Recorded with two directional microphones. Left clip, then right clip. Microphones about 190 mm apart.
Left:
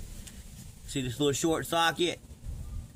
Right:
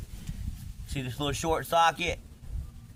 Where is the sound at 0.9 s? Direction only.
25° right (ahead or behind).